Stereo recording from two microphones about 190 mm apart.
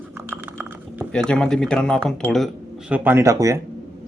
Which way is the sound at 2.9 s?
10° right (ahead or behind).